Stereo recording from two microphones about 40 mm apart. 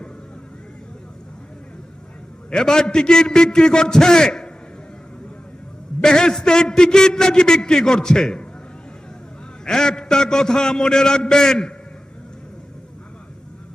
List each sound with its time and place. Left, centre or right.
2.5 s a man's voice: centre
6.0 s a man's voice: centre
9.6 s a man's voice: centre